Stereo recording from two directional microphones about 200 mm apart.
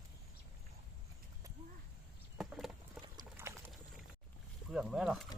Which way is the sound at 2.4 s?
Centre (ahead or behind).